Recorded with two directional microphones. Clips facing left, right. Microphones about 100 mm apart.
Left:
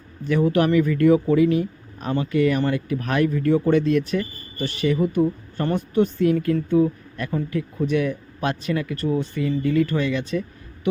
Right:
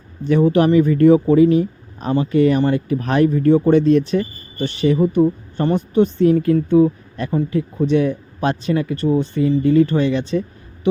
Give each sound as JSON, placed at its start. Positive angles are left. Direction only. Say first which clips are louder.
{"t": 0.3, "sound": "speech", "louder": "right 5 dB", "side_deg": -25}